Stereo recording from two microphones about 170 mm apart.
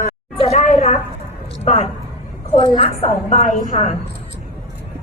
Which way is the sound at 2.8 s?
40° left (ahead or behind).